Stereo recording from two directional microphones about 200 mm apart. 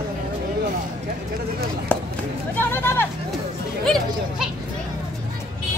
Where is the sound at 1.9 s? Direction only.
10° left (ahead or behind).